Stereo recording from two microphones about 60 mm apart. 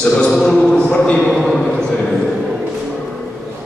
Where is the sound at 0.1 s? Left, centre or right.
Centre.